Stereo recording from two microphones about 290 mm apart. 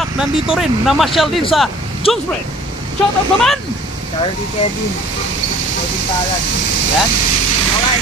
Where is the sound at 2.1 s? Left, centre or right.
Centre.